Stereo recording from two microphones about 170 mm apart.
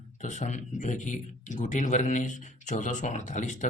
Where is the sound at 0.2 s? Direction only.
45° left (ahead or behind).